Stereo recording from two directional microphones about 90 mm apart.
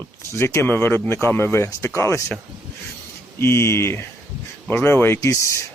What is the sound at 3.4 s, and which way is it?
Speech, 30° left (ahead or behind).